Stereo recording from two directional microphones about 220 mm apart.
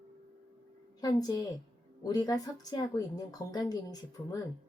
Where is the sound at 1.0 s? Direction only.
15° left (ahead or behind).